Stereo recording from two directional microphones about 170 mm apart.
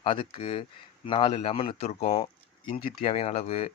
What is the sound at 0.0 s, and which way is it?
Speech, 30° left (ahead or behind).